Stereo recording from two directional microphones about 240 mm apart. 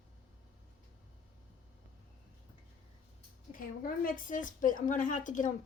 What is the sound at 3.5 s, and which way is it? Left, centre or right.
A woman's voice, left.